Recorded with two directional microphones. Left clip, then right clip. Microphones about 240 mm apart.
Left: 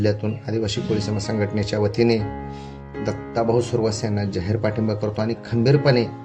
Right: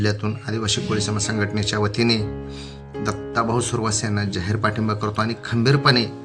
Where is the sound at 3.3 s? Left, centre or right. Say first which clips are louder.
Left 2 dB; right.